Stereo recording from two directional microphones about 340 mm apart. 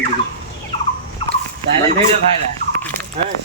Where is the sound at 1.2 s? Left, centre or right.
Centre.